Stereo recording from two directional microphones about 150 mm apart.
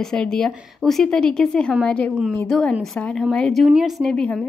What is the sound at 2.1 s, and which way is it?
A woman's voice, 5° right (ahead or behind).